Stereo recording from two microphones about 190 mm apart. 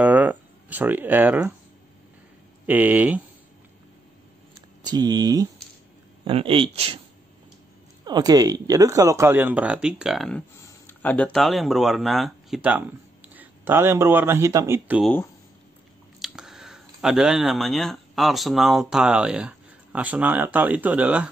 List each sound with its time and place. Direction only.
0.0 s a sound: 10° right (ahead or behind)
2.6 s speech: 10° right (ahead or behind)
4.8 s speech: 20° right (ahead or behind)
8.0 s speech: 20° right (ahead or behind)
16.2 s speech: centre (ahead or behind)